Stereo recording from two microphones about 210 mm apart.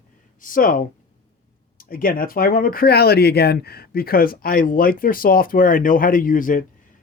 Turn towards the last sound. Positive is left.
turn(degrees=40)  # may be behind; listen again after turning